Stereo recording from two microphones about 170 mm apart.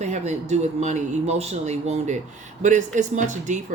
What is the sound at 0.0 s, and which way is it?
A woman's voice, 40° right (ahead or behind).